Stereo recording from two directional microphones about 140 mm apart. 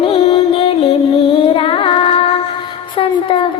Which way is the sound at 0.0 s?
40° left (ahead or behind).